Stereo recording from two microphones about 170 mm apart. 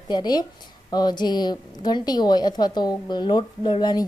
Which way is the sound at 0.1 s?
25° left (ahead or behind).